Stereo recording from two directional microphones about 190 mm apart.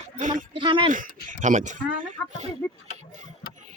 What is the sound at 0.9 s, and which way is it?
Speech, 40° right (ahead or behind).